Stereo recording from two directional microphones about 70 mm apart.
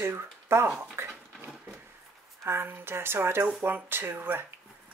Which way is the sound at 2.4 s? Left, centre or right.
Right.